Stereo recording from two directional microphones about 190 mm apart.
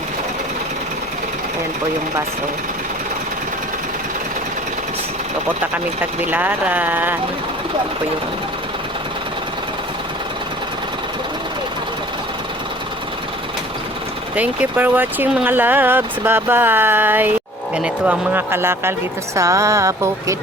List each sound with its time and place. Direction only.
6.3 s speech: 10° right (ahead or behind)
14.3 s speech: 10° right (ahead or behind)